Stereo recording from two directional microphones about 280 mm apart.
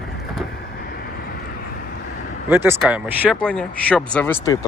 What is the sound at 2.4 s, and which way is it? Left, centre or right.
Speech, centre.